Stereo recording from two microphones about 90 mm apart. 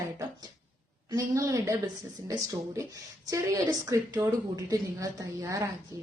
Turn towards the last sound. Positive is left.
turn(degrees=-40)  # may be behind; listen again after turning